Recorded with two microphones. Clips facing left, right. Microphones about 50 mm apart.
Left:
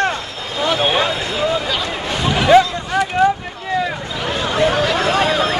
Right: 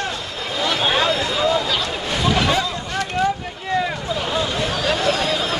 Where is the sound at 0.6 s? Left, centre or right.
Left.